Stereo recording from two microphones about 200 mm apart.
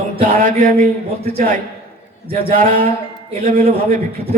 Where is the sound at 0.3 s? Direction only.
40° right (ahead or behind).